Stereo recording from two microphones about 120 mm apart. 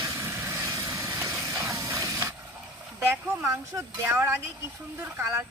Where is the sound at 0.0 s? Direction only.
25° right (ahead or behind).